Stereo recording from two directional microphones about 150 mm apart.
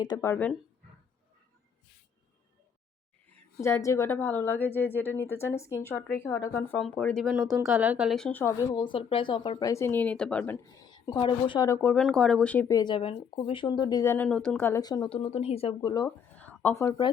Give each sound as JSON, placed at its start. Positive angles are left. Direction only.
{"t": 0.0, "sound": "speech", "side_deg": 25}
{"t": 0.3, "sound": "speech", "side_deg": 10}
{"t": 3.6, "sound": "speech", "side_deg": 20}
{"t": 8.3, "sound": "speech", "side_deg": 15}
{"t": 8.7, "sound": "speech", "side_deg": 30}
{"t": 10.7, "sound": "a woman's voice", "side_deg": 25}
{"t": 11.7, "sound": "speech", "side_deg": 15}
{"t": 11.9, "sound": "speech", "side_deg": 0}
{"t": 12.6, "sound": "speech", "side_deg": 25}
{"t": 14.0, "sound": "speech", "side_deg": 15}
{"t": 14.3, "sound": "speech", "side_deg": 5}
{"t": 15.9, "sound": "speech", "side_deg": 25}
{"t": 16.3, "sound": "a sound", "side_deg": 10}